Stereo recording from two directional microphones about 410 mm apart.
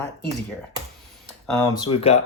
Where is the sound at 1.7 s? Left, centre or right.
Centre.